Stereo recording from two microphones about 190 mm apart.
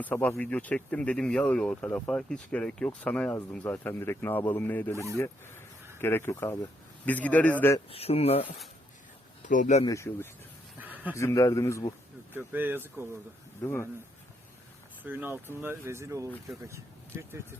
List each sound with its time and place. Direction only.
0.0 s speech: 10° left (ahead or behind)
7.9 s speech: 30° left (ahead or behind)
9.8 s speech: 15° left (ahead or behind)
10.8 s a sound: 10° right (ahead or behind)
11.1 s speech: 15° left (ahead or behind)
12.3 s speech: 10° right (ahead or behind)
13.6 s speech: 15° left (ahead or behind)
15.0 s speech: 10° right (ahead or behind)